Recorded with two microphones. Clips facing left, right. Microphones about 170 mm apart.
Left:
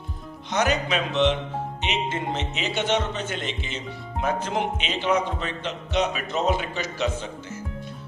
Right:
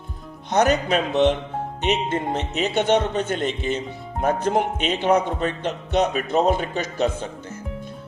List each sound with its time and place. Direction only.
0.5 s a man's voice: 50° right (ahead or behind)